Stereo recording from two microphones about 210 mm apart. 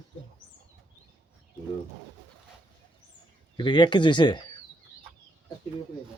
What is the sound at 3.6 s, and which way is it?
Speech, 20° left (ahead or behind).